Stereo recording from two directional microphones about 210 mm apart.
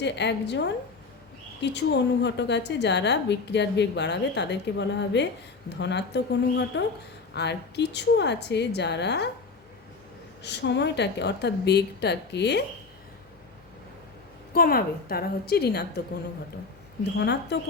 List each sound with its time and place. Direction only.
0.0 s a woman's voice: 55° left (ahead or behind)
10.4 s speech: 55° left (ahead or behind)
14.5 s speech: 45° left (ahead or behind)
17.2 s speech: 55° left (ahead or behind)